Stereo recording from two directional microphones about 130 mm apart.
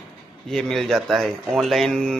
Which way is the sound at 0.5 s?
5° left (ahead or behind).